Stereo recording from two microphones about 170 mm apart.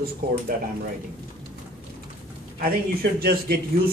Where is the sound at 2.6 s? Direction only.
65° right (ahead or behind).